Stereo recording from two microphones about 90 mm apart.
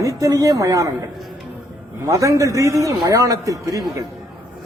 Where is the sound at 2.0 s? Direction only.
35° right (ahead or behind).